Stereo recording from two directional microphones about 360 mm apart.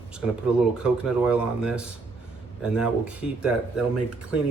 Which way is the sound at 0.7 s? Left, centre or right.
Centre.